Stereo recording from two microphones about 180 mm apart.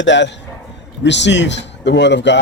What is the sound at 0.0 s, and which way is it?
A man's voice, 80° left.